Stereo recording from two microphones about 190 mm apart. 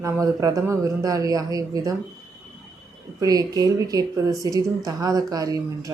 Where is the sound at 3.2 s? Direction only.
20° right (ahead or behind).